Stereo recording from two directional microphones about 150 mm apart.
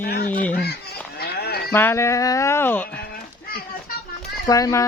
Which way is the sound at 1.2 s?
90° left.